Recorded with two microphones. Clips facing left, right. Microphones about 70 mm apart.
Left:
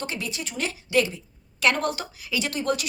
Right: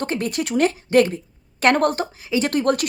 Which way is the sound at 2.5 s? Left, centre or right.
Right.